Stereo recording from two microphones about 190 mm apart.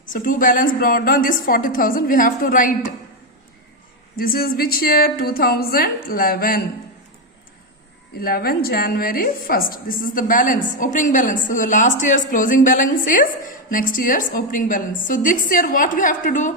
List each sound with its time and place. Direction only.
0.1 s a woman's voice: 45° left (ahead or behind)
4.2 s a woman's voice: 50° left (ahead or behind)
8.2 s a woman's voice: 50° left (ahead or behind)